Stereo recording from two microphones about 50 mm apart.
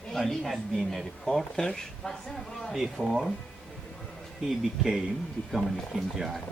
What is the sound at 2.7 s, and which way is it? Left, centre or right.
Speech, centre.